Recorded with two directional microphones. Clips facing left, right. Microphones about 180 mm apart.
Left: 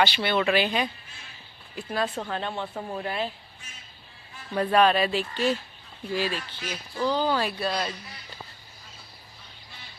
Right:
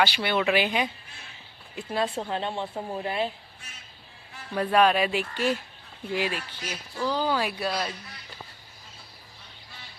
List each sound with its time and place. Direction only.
0.0 s speech: 10° right (ahead or behind)
1.7 s speech: 25° right (ahead or behind)
4.5 s speech: 5° right (ahead or behind)
7.0 s speech: 5° right (ahead or behind)